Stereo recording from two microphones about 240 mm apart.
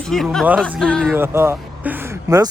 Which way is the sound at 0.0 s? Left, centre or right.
Centre.